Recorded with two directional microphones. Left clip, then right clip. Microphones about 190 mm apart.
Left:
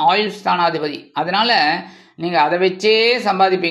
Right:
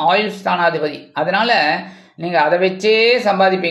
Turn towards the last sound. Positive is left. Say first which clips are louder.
# right 2 dB
turn(degrees=25)  # may be behind; listen again after turning